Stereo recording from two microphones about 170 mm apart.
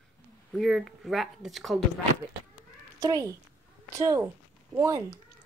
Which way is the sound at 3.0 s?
20° right (ahead or behind).